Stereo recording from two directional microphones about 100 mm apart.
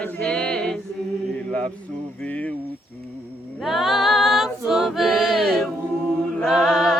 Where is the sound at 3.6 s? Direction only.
Centre (ahead or behind).